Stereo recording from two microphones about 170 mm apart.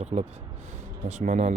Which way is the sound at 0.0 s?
40° right (ahead or behind).